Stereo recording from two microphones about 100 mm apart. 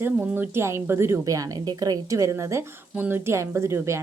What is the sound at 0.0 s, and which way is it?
A woman's voice, 15° right (ahead or behind).